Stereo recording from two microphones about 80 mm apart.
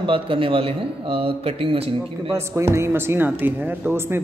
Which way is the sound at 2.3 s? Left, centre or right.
Right.